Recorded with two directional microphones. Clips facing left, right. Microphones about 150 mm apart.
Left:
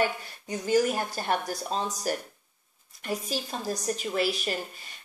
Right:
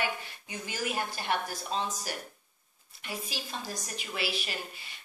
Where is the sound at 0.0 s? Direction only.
40° left (ahead or behind).